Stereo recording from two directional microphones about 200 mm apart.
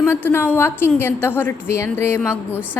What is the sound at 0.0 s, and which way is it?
A woman's voice, 10° left (ahead or behind).